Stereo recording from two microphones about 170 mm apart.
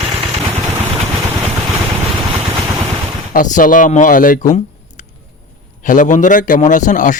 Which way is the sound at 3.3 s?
50° left (ahead or behind).